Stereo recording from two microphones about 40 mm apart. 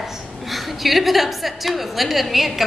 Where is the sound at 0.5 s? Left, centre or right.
Centre.